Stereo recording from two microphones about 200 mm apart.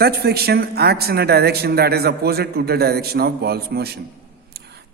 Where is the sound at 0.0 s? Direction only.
50° right (ahead or behind).